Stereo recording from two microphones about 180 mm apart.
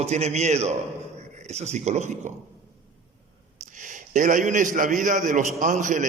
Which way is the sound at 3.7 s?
45° right (ahead or behind).